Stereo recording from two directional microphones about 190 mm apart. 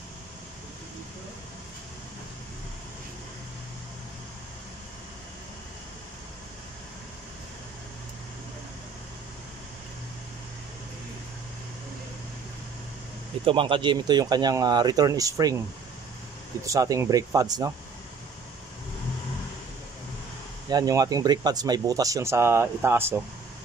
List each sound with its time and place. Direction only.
13.5 s speech: 25° right (ahead or behind)
16.6 s speech: 15° right (ahead or behind)
20.7 s speech: 20° right (ahead or behind)